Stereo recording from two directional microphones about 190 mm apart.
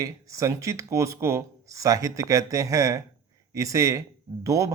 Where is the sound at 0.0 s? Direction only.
15° right (ahead or behind).